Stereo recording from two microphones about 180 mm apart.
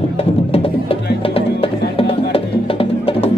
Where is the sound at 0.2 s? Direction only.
30° left (ahead or behind).